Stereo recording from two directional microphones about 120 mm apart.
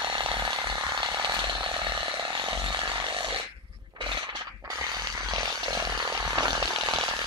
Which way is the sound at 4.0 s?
40° right (ahead or behind).